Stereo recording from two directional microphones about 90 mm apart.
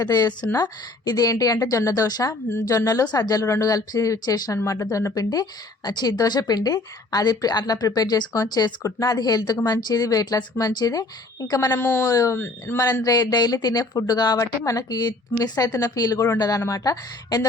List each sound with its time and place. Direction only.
0.0 s speech: 45° left (ahead or behind)
11.7 s speech: 30° left (ahead or behind)
12.8 s speech: 45° left (ahead or behind)